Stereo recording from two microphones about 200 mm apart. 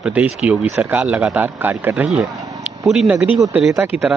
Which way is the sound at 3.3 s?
15° right (ahead or behind).